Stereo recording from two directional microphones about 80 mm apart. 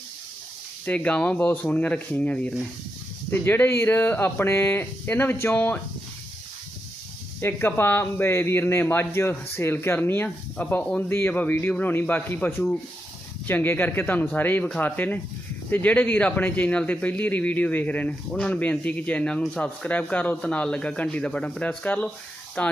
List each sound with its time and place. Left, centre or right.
0.9 s speech: centre
3.2 s speech: left
7.4 s speech: left